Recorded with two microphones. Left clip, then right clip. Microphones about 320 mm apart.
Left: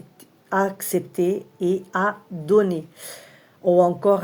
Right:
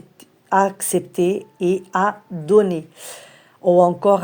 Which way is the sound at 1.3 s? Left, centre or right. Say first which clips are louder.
Right 3 dB; centre.